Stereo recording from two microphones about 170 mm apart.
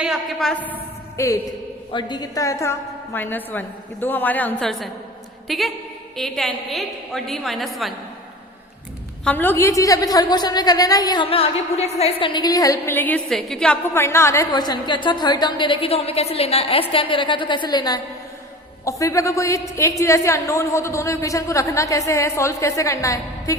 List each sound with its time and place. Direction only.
0.0 s a woman's voice: centre (ahead or behind)
1.1 s a woman's voice: 15° left (ahead or behind); by 7.9 s centre (ahead or behind)
9.2 s a woman's voice: 10° left (ahead or behind)